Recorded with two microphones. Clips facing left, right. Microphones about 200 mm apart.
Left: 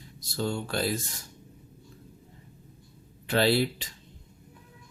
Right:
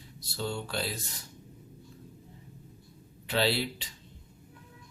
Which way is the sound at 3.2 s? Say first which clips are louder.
Left 5 dB; 50° left (ahead or behind).